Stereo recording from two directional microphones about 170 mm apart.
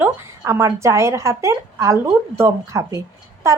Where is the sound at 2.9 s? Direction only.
15° right (ahead or behind).